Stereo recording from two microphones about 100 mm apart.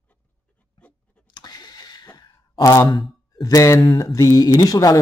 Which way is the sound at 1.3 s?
40° left (ahead or behind).